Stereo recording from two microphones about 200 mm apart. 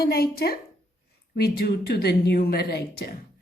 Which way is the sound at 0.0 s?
50° left (ahead or behind).